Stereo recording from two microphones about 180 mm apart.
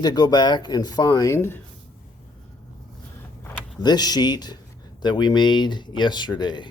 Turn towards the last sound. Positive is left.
turn(degrees=25)  # may be behind; listen again after turning